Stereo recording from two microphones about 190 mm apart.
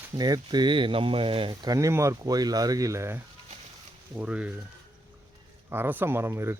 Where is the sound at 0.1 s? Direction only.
20° right (ahead or behind).